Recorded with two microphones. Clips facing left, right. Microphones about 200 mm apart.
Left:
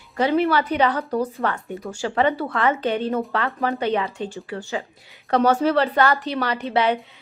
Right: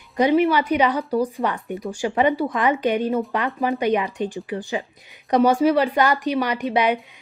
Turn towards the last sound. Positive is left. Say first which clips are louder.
# right 1 dB
turn(degrees=-15)  # may be behind; listen again after turning